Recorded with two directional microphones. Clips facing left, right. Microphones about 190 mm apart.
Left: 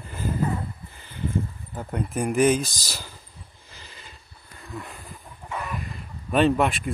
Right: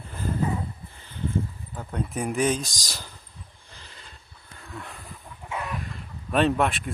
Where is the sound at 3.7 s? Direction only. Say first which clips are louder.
Left 3 dB; 5° left (ahead or behind).